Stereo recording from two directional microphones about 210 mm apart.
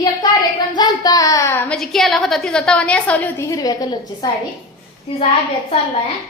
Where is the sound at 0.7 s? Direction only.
15° left (ahead or behind).